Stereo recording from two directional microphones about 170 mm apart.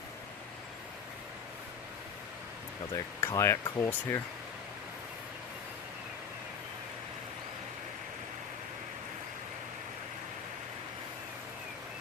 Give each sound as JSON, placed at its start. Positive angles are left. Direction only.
{"t": 3.2, "sound": "speech", "side_deg": 15}